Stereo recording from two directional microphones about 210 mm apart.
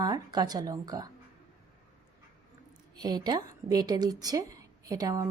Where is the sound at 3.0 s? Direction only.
20° right (ahead or behind).